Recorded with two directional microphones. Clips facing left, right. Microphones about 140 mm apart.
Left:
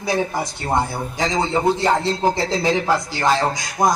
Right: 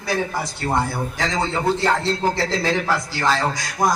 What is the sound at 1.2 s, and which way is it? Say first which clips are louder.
A man's voice: left 4 dB; 20° left (ahead or behind).